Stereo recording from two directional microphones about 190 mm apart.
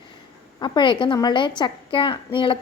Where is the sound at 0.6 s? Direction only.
25° left (ahead or behind).